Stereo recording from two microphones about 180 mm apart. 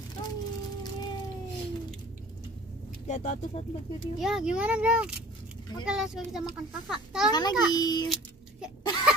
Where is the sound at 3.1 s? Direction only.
40° left (ahead or behind).